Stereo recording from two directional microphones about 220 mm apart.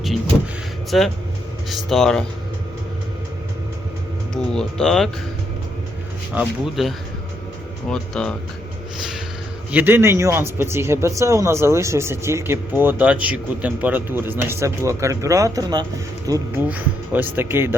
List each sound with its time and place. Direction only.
0.9 s speech: centre (ahead or behind)
4.5 s speech: centre (ahead or behind)
6.3 s speech: 5° right (ahead or behind)
9.7 s speech: 10° right (ahead or behind)